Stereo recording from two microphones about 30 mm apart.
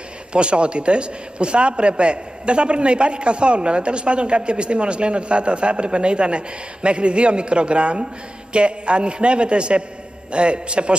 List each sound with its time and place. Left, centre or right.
0.3 s a man's voice: right